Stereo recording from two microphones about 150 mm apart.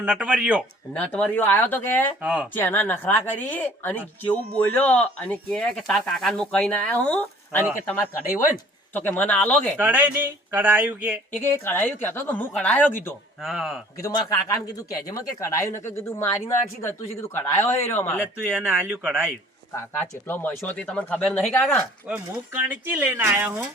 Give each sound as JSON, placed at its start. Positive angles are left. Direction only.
{"t": 0.0, "sound": "speech", "side_deg": -10}
{"t": 0.9, "sound": "speech", "side_deg": 10}
{"t": 2.2, "sound": "speech", "side_deg": -10}
{"t": 2.5, "sound": "speech", "side_deg": 15}
{"t": 8.9, "sound": "speech", "side_deg": 10}
{"t": 9.7, "sound": "speech", "side_deg": -10}
{"t": 11.3, "sound": "speech", "side_deg": 15}
{"t": 13.4, "sound": "speech", "side_deg": 0}
{"t": 14.0, "sound": "speech", "side_deg": 20}
{"t": 17.6, "sound": "speech", "side_deg": 15}
{"t": 18.4, "sound": "speech", "side_deg": -10}
{"t": 19.7, "sound": "speech", "side_deg": 15}
{"t": 22.0, "sound": "speech", "side_deg": -10}